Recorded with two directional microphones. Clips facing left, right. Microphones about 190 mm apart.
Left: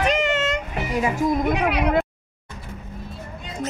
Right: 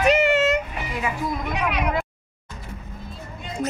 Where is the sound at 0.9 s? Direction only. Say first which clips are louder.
Left 6 dB; 40° left (ahead or behind).